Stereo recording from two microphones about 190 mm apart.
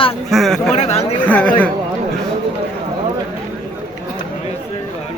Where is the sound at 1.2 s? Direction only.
5° left (ahead or behind).